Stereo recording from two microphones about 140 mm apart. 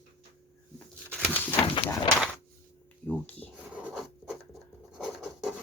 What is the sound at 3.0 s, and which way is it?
Speech, 10° left (ahead or behind).